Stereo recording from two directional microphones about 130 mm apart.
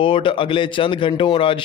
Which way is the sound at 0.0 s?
45° left (ahead or behind).